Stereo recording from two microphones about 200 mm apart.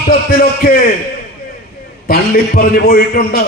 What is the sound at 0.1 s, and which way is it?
Speech, 50° left (ahead or behind).